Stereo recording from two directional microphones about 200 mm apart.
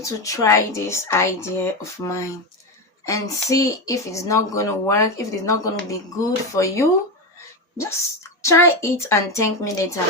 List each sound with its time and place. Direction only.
0.0 s speech: 15° left (ahead or behind)
8.4 s speech: 15° left (ahead or behind)